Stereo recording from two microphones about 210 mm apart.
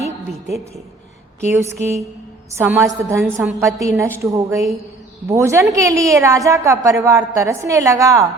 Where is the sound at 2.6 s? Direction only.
15° right (ahead or behind).